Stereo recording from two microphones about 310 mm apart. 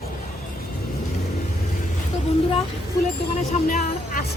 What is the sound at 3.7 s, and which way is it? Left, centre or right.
Music, left.